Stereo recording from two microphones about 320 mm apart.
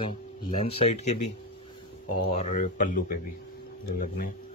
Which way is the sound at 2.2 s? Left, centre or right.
Left.